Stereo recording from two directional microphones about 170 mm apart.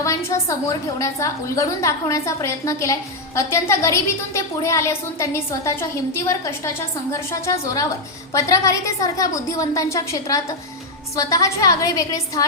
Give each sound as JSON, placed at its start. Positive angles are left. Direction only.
{"t": 0.0, "sound": "a woman's voice", "side_deg": 15}